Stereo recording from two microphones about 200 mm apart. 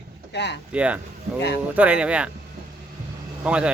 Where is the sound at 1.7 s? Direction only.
5° right (ahead or behind).